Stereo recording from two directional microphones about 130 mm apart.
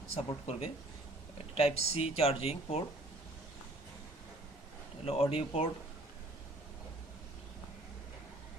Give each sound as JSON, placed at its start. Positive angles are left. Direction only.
{"t": 0.2, "sound": "speech", "side_deg": 50}
{"t": 5.0, "sound": "speech", "side_deg": 50}